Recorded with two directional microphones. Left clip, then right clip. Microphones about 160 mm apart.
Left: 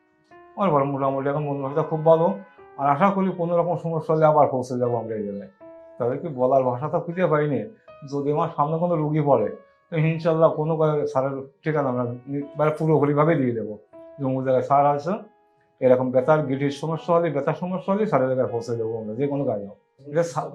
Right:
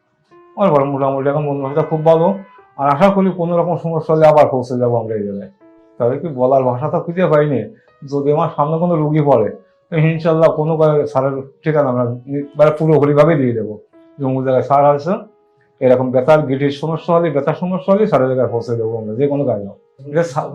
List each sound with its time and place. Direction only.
0.5 s speech: 15° right (ahead or behind)